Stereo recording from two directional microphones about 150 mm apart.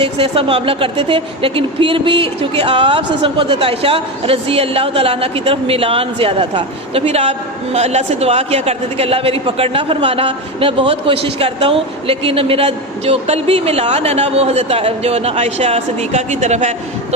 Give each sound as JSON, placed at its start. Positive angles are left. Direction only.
{"t": 0.0, "sound": "a woman's voice", "side_deg": -35}
{"t": 7.0, "sound": "a woman's voice", "side_deg": -45}